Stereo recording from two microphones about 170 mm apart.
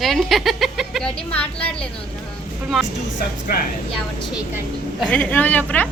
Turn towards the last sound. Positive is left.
turn(degrees=10)  # may be behind; listen again after turning